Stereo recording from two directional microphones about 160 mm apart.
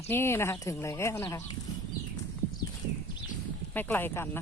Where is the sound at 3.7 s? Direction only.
10° left (ahead or behind).